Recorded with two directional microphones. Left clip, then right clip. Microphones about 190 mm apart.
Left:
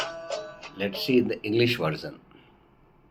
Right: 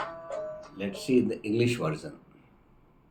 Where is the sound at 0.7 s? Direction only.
Centre (ahead or behind).